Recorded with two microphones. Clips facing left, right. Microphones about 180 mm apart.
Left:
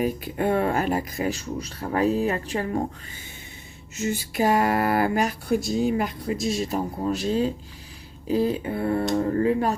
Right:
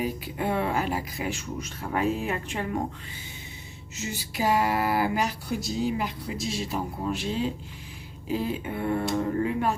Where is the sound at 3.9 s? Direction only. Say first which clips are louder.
Left 7 dB; 50° left (ahead or behind).